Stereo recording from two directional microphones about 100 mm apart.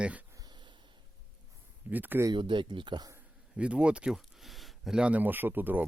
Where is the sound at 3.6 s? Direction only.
10° right (ahead or behind).